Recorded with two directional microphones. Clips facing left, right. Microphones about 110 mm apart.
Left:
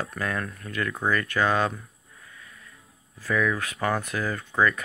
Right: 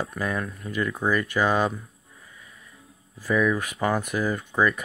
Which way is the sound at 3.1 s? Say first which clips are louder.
Right 3 dB; 15° right (ahead or behind).